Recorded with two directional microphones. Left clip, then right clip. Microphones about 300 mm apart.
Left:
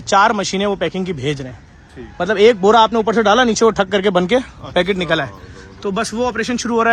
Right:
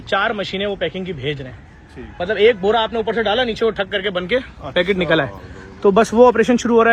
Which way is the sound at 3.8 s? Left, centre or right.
Left.